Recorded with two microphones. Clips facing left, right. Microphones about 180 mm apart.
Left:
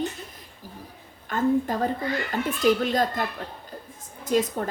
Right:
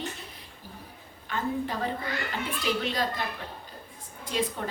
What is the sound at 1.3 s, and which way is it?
A woman's voice, 45° left (ahead or behind).